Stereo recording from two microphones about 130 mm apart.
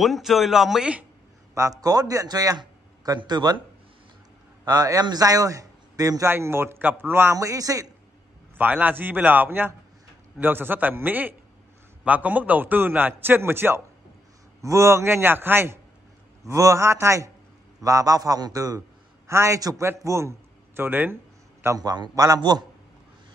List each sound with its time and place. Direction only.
0.0 s a man's voice: centre (ahead or behind)
1.5 s a man's voice: 25° right (ahead or behind)
4.6 s a man's voice: 30° right (ahead or behind)
8.5 s a man's voice: 15° right (ahead or behind)
21.6 s a man's voice: 30° right (ahead or behind)